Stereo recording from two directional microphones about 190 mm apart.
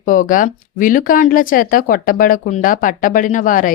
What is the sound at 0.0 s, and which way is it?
Speech, 45° left (ahead or behind).